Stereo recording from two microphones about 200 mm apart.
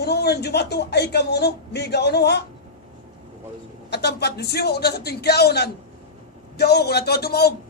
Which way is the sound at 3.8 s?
55° left (ahead or behind).